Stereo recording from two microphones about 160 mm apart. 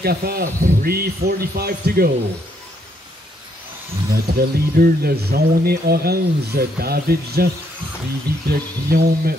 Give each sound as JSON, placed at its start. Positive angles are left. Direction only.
{"t": 0.0, "sound": "speech", "side_deg": -75}
{"t": 4.1, "sound": "speech", "side_deg": -70}
{"t": 8.5, "sound": "speech", "side_deg": -75}